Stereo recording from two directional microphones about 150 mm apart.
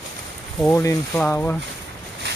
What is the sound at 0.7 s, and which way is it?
Speech, 20° left (ahead or behind).